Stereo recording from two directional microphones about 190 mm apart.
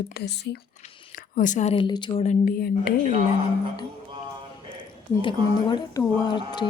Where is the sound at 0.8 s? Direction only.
35° left (ahead or behind).